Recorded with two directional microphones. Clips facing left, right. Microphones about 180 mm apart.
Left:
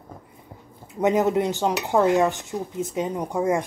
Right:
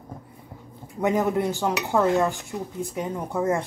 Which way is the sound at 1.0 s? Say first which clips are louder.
Left 2 dB; 20° left (ahead or behind).